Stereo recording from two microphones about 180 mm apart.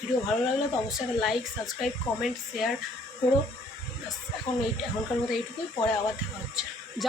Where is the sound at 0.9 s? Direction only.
Centre (ahead or behind).